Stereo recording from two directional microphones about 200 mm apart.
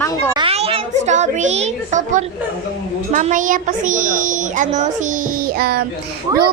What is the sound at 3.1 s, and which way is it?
A woman's voice, 40° right (ahead or behind).